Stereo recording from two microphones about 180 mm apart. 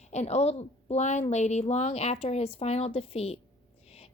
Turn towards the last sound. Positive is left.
turn(degrees=35)  # may be behind; listen again after turning